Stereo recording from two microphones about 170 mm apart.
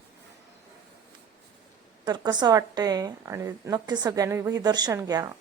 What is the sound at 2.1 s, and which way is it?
A woman's voice, 25° right (ahead or behind).